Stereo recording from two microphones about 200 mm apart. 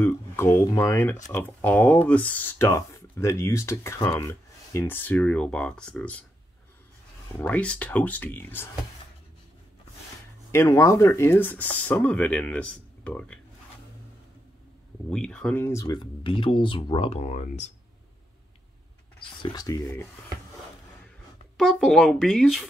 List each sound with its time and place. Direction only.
0.0 s speech: 15° left (ahead or behind)
7.3 s speech: 5° left (ahead or behind)
10.5 s speech: 15° left (ahead or behind)
15.0 s speech: 5° left (ahead or behind); by 17.6 s 35° left (ahead or behind)
19.4 s speech: 20° left (ahead or behind)
21.5 s speech: centre (ahead or behind)